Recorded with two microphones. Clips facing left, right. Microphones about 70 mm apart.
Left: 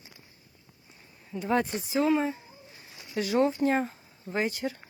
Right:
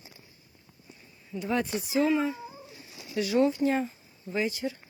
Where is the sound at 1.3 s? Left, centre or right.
Left.